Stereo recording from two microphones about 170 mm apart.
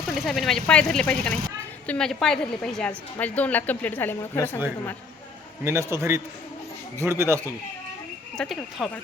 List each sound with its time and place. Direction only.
0.1 s a woman's voice: centre (ahead or behind)
5.6 s a man's voice: 15° right (ahead or behind)
8.4 s speech: centre (ahead or behind)